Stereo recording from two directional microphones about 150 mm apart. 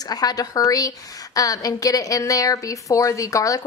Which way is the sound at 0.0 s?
25° left (ahead or behind).